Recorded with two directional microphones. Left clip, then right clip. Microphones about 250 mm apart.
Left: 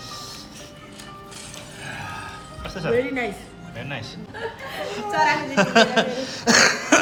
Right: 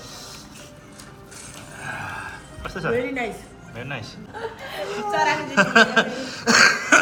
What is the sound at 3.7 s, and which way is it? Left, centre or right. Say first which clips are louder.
A woman's voice: even; centre.